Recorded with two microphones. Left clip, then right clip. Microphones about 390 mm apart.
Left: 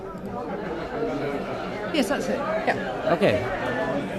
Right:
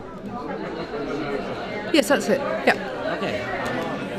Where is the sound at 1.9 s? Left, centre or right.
Right.